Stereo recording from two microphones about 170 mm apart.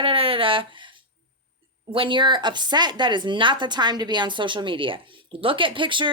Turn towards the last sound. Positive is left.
turn(degrees=-30)  # may be behind; listen again after turning